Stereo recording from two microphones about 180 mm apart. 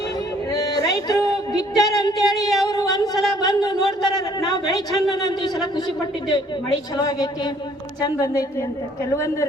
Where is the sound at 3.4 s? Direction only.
25° left (ahead or behind).